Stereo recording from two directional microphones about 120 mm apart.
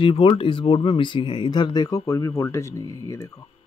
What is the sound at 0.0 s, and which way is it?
Speech, 50° left (ahead or behind).